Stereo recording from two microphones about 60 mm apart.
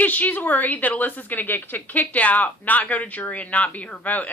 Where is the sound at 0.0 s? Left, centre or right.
Left.